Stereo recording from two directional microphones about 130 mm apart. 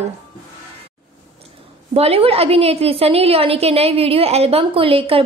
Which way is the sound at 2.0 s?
50° right (ahead or behind).